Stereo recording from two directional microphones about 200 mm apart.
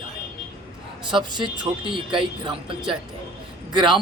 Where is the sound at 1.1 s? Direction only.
20° right (ahead or behind).